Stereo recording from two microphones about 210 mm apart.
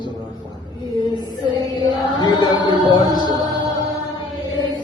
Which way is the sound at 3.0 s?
20° right (ahead or behind).